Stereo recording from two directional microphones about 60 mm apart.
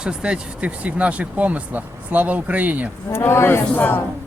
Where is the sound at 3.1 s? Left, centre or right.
Left.